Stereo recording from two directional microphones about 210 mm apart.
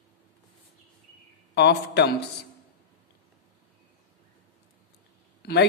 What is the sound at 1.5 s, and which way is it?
Speech, 55° left (ahead or behind).